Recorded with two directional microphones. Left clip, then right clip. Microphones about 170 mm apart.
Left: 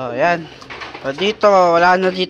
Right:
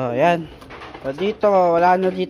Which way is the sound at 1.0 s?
5° right (ahead or behind).